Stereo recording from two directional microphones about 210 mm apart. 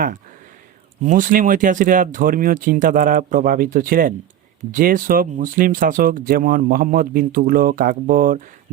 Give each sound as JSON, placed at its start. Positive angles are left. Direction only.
{"t": 1.0, "sound": "speech", "side_deg": -40}